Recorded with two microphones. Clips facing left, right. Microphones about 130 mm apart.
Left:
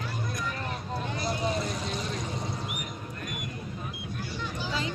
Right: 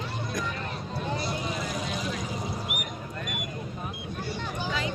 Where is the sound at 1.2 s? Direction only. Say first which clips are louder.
Left 2 dB; 30° left (ahead or behind).